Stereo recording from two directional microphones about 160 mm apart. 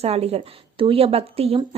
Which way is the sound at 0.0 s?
40° right (ahead or behind).